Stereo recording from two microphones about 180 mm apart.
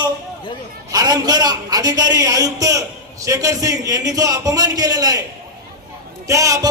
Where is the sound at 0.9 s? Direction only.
20° right (ahead or behind).